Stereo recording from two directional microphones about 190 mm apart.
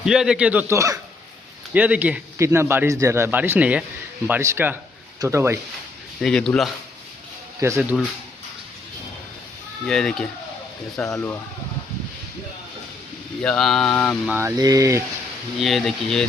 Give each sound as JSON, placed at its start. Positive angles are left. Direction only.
{"t": 0.0, "sound": "a man's voice", "side_deg": -5}
{"t": 6.1, "sound": "a man's voice", "side_deg": 0}
{"t": 7.8, "sound": "a man's voice", "side_deg": 0}
{"t": 9.8, "sound": "a man's voice", "side_deg": 5}
{"t": 13.4, "sound": "a man's voice", "side_deg": 5}
{"t": 14.3, "sound": "speech", "side_deg": -10}
{"t": 15.6, "sound": "a man's voice", "side_deg": 0}